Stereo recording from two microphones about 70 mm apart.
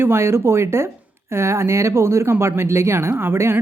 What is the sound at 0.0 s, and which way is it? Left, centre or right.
Speech, right.